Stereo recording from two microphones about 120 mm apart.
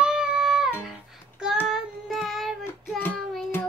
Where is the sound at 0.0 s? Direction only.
5° right (ahead or behind).